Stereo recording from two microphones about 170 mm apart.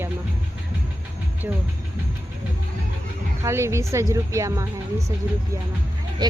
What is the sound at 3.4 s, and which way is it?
A woman's voice, 15° right (ahead or behind).